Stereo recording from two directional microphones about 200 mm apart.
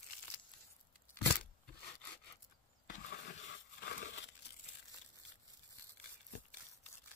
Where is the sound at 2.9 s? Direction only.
40° left (ahead or behind).